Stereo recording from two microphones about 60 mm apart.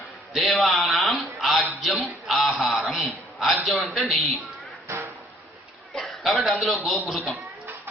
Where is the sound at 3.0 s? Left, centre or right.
Centre.